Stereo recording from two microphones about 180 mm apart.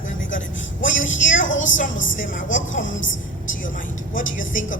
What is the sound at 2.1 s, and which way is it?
Speech, 45° left (ahead or behind).